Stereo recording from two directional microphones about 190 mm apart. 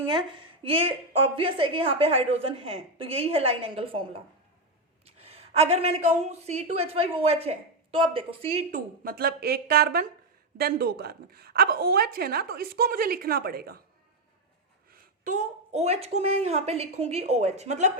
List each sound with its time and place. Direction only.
0.1 s a woman's voice: 25° right (ahead or behind)
5.0 s a sound: 30° right (ahead or behind)
6.2 s speech: 35° right (ahead or behind)
8.7 s a woman's voice: 50° right (ahead or behind)
14.9 s speech: 45° right (ahead or behind)